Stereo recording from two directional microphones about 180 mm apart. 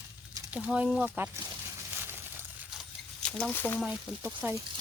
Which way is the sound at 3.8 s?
5° right (ahead or behind).